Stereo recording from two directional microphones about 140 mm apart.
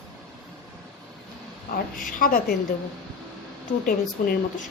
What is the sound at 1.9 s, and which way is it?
Speech, 85° left.